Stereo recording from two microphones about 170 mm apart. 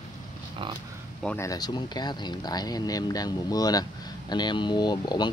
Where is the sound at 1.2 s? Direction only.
15° left (ahead or behind).